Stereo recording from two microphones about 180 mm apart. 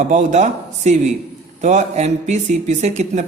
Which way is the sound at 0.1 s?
40° right (ahead or behind).